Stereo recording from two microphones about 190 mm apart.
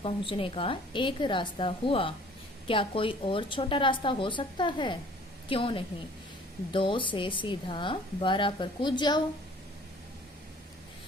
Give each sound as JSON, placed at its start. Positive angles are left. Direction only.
{"t": 0.0, "sound": "a woman's voice", "side_deg": 30}